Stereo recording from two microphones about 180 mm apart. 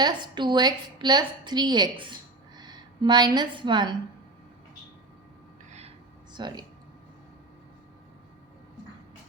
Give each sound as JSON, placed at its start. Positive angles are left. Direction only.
{"t": 0.0, "sound": "a woman's voice", "side_deg": -25}
{"t": 6.3, "sound": "a woman's voice", "side_deg": -25}